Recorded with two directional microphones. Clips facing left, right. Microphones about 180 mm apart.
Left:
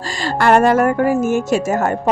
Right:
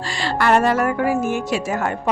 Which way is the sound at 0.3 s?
50° left (ahead or behind).